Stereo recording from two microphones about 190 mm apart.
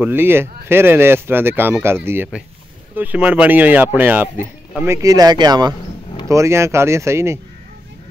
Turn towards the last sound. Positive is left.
turn(degrees=-15)  # may be behind; listen again after turning